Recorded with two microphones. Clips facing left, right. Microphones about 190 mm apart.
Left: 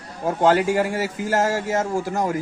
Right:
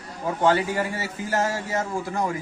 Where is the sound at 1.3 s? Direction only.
45° left (ahead or behind).